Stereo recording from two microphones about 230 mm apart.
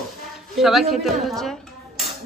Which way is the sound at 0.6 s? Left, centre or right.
Centre.